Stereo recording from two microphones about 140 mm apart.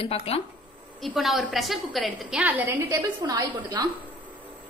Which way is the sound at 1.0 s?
Centre (ahead or behind).